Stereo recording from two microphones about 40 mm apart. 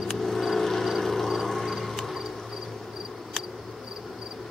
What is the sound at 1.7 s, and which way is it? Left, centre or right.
Cricket, centre.